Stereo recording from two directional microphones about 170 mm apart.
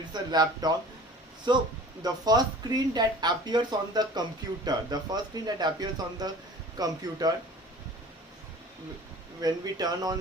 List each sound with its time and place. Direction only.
0.1 s speech: 25° right (ahead or behind)
9.4 s speech: 25° right (ahead or behind)